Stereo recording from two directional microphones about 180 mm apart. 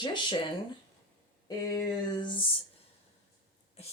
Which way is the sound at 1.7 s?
25° left (ahead or behind).